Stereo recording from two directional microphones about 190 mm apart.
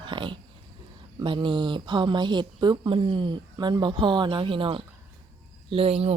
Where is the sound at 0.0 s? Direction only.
25° right (ahead or behind).